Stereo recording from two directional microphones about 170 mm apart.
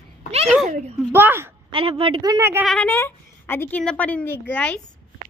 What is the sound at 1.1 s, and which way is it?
Speech, 15° right (ahead or behind).